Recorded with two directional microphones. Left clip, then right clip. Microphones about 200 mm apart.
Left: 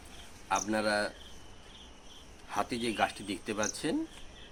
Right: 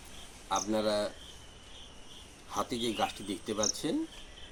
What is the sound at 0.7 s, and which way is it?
Speech, centre (ahead or behind).